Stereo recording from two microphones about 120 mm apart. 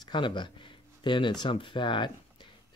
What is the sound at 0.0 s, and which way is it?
Speech, 40° left (ahead or behind).